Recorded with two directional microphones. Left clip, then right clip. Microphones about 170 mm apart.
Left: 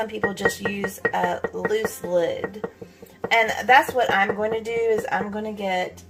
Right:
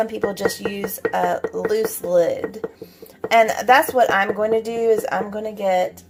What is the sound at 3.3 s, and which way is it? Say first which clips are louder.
Speech: right 3 dB; 45° right (ahead or behind).